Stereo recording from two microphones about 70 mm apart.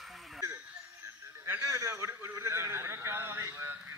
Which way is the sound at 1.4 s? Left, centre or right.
Right.